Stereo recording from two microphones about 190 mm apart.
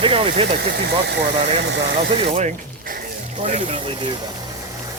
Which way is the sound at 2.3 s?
40° right (ahead or behind).